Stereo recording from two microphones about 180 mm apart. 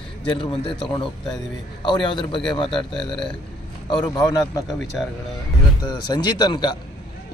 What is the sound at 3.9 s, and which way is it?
Speech, 25° left (ahead or behind).